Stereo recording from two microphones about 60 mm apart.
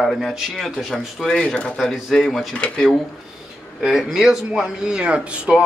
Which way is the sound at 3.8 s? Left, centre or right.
Centre.